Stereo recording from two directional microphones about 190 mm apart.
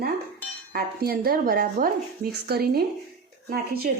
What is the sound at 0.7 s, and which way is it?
Speech, 50° right (ahead or behind).